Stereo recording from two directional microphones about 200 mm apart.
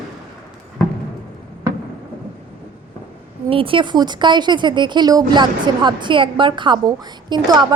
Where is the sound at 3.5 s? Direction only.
25° right (ahead or behind).